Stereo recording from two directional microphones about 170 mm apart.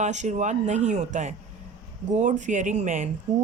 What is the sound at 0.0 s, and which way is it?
Speech, 45° right (ahead or behind).